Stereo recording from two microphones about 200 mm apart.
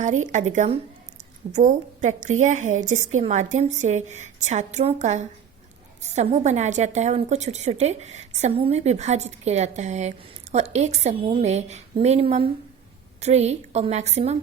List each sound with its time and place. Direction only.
0.0 s a woman's voice: 35° right (ahead or behind)